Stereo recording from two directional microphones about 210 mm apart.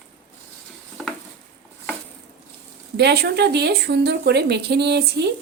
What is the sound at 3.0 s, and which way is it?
A woman's voice, 50° right (ahead or behind).